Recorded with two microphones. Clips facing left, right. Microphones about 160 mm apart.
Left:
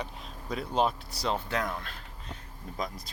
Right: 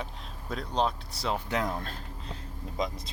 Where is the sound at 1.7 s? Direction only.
35° right (ahead or behind).